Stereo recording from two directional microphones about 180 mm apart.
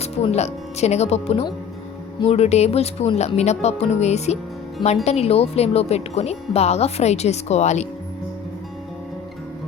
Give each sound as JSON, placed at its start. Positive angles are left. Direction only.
{"t": 0.0, "sound": "speech", "side_deg": 35}